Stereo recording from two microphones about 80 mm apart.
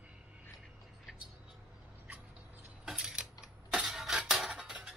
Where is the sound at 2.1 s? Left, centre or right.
Right.